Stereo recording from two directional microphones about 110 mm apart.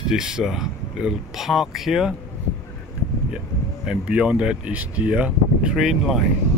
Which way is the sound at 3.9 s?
10° right (ahead or behind).